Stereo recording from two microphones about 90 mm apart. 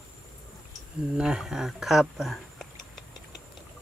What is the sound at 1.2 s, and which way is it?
Speech, 5° right (ahead or behind).